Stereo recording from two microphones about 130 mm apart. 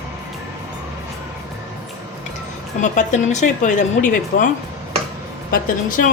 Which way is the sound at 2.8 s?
70° left (ahead or behind).